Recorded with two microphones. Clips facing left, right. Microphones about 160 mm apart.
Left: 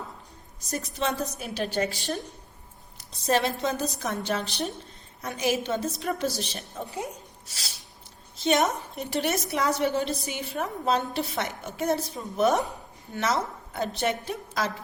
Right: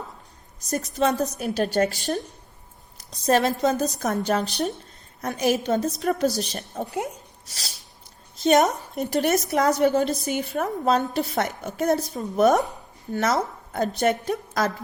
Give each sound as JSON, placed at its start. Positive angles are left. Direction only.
{"t": 0.7, "sound": "a woman's voice", "side_deg": -45}
{"t": 7.4, "sound": "a sound", "side_deg": -40}
{"t": 8.4, "sound": "a woman's voice", "side_deg": -45}